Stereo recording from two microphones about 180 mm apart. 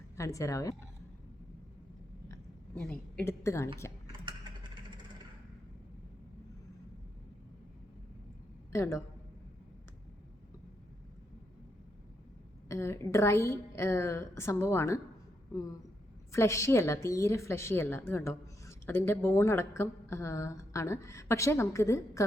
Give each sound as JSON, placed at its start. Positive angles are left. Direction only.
{"t": 0.2, "sound": "a woman's voice", "side_deg": 15}
{"t": 2.8, "sound": "a woman's voice", "side_deg": 5}
{"t": 4.1, "sound": "a sound", "side_deg": -25}
{"t": 8.7, "sound": "a man's voice", "side_deg": 15}
{"t": 12.6, "sound": "a woman's voice", "side_deg": 15}
{"t": 16.3, "sound": "a woman's voice", "side_deg": 15}